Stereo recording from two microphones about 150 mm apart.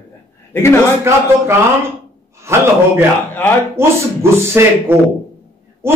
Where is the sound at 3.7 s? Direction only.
15° right (ahead or behind).